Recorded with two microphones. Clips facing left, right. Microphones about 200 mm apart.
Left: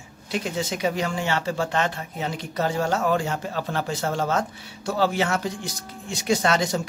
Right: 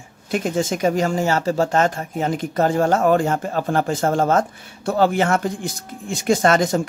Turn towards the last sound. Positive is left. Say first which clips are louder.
# right 6 dB
turn(degrees=-50)  # may be behind; listen again after turning